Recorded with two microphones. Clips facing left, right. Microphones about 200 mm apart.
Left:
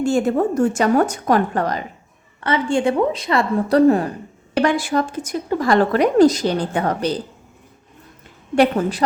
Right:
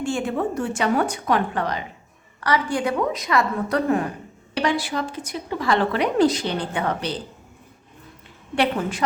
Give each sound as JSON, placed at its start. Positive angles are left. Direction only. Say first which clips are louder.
{"t": 0.0, "sound": "a woman's voice", "louder": "left 6 dB", "side_deg": 40}
{"t": 2.4, "sound": "a woman's voice", "louder": "left 4 dB", "side_deg": 25}
{"t": 4.5, "sound": "a woman's voice", "louder": "left 6 dB", "side_deg": 50}
{"t": 8.5, "sound": "a woman's voice", "louder": "left 6 dB", "side_deg": 40}